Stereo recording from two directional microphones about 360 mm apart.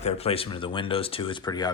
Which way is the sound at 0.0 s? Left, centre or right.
Centre.